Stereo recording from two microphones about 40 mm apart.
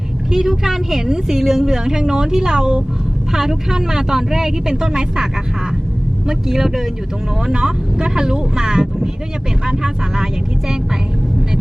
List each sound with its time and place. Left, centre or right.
0.3 s a woman's voice: centre